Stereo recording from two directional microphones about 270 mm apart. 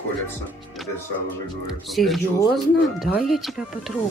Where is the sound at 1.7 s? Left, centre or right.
Centre.